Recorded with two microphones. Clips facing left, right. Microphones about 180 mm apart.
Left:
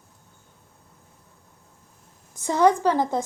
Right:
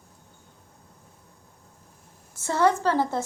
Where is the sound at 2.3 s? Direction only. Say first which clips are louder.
Left 3 dB; 15° left (ahead or behind).